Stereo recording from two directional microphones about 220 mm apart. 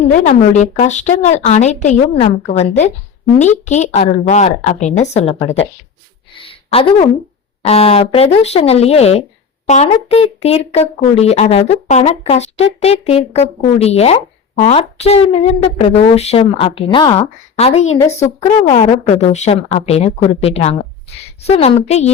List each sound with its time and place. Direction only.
0.1 s a woman's voice: 35° left (ahead or behind)
6.3 s a sound: 25° left (ahead or behind)
7.6 s a woman's voice: 25° left (ahead or behind)